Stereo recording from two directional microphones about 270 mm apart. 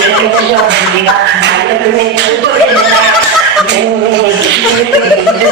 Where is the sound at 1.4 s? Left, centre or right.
Right.